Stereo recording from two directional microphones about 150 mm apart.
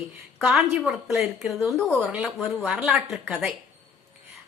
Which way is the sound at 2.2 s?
Centre (ahead or behind).